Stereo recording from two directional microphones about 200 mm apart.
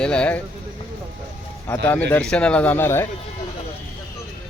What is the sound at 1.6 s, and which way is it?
A man's voice, 10° left (ahead or behind).